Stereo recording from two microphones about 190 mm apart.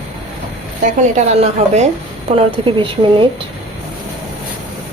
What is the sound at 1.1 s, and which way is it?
A woman's voice, 35° right (ahead or behind).